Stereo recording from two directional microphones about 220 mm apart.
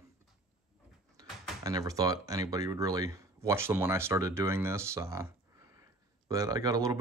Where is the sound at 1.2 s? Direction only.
15° right (ahead or behind).